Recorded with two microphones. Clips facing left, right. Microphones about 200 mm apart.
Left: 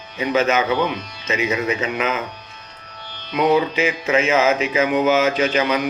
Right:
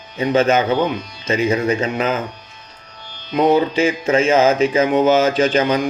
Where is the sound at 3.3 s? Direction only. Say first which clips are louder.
Right 3 dB; 30° right (ahead or behind).